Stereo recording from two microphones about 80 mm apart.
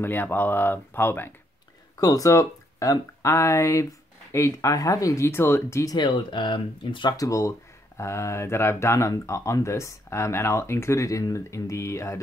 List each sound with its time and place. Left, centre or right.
0.0 s speech: left
2.0 s speech: left
5.2 s speech: left
5.9 s speech: left
7.2 s speech: left